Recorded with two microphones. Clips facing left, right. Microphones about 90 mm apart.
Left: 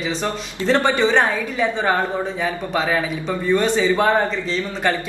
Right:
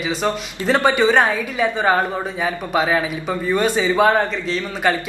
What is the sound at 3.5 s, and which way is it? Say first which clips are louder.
Speech: right 2 dB; 15° right (ahead or behind).